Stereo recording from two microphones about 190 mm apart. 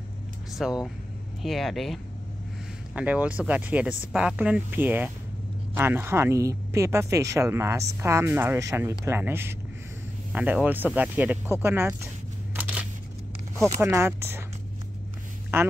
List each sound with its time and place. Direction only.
0.6 s speech: centre (ahead or behind)
13.7 s speech: 15° right (ahead or behind)
15.5 s a woman's voice: 10° right (ahead or behind)